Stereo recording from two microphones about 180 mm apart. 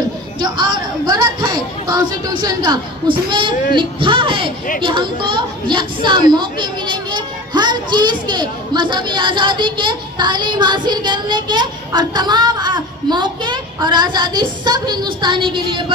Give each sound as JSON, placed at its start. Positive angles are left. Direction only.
{"t": 0.4, "sound": "a woman's voice", "side_deg": -25}